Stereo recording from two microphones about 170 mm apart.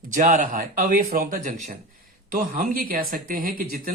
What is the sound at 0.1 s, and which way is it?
Speech, 50° right (ahead or behind).